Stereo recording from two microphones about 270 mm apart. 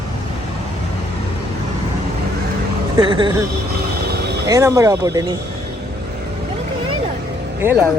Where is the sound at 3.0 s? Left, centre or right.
Centre.